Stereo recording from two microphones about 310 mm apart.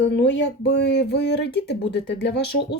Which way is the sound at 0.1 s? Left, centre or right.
Left.